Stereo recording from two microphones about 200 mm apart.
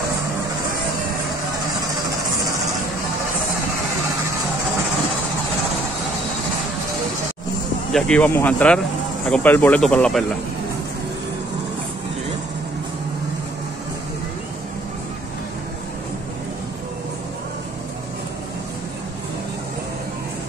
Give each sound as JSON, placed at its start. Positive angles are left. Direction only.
{"t": 7.9, "sound": "speech", "side_deg": 5}